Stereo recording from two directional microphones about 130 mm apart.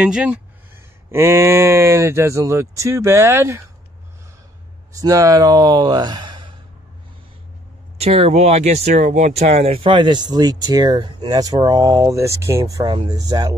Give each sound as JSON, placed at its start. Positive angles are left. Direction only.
{"t": 0.0, "sound": "speech", "side_deg": -10}
{"t": 1.1, "sound": "speech", "side_deg": -20}
{"t": 4.9, "sound": "speech", "side_deg": -25}
{"t": 8.0, "sound": "speech", "side_deg": -55}
{"t": 9.7, "sound": "speech", "side_deg": -45}